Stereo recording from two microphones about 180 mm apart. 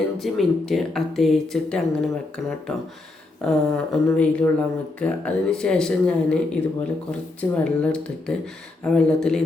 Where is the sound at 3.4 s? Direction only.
5° left (ahead or behind).